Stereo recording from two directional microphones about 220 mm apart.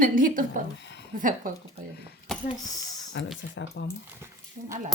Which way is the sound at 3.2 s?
50° left (ahead or behind).